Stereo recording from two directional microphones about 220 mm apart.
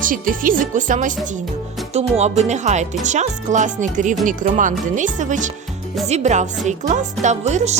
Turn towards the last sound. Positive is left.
turn(degrees=-30)  # may be behind; listen again after turning